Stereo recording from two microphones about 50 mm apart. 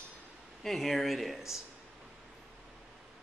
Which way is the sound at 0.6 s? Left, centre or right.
Centre.